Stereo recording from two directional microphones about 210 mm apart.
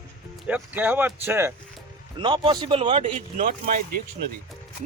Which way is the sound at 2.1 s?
25° right (ahead or behind).